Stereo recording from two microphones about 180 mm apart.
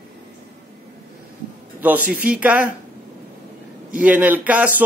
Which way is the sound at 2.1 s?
10° right (ahead or behind).